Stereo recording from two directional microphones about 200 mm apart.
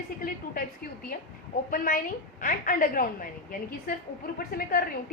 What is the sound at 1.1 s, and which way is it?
A woman's voice, 45° left (ahead or behind).